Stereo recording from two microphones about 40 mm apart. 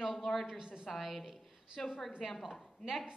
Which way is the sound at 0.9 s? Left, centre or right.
Centre.